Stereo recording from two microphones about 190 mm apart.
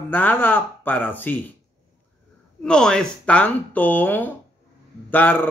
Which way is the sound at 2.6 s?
5° left (ahead or behind).